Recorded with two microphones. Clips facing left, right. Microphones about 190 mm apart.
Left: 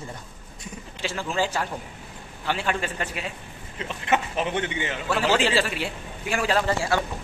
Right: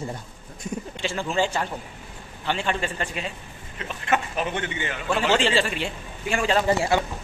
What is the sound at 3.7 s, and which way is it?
A man's voice, 20° left (ahead or behind).